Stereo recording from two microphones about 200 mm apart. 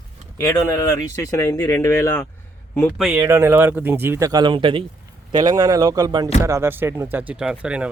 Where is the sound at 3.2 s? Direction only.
15° right (ahead or behind).